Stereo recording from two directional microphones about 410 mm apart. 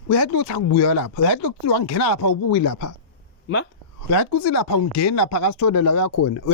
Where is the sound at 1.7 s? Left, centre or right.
Left.